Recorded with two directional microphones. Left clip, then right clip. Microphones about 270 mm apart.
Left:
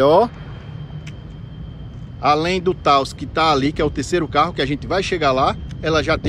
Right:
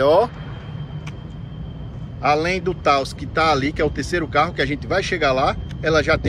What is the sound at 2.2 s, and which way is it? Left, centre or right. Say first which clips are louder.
Speech: left 2 dB; centre.